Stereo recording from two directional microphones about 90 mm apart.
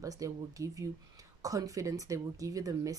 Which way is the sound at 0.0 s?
40° right (ahead or behind).